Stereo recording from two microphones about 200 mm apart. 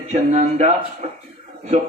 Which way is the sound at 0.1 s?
35° right (ahead or behind).